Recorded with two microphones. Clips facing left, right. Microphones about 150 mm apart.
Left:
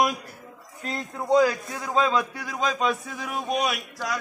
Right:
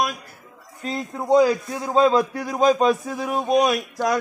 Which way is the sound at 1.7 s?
35° right (ahead or behind).